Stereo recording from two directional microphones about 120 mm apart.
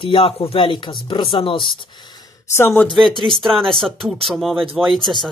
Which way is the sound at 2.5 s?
20° left (ahead or behind).